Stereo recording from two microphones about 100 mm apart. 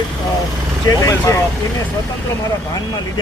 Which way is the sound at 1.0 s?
35° left (ahead or behind).